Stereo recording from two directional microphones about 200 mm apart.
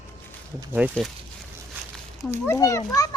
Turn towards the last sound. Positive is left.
turn(degrees=20)  # may be behind; listen again after turning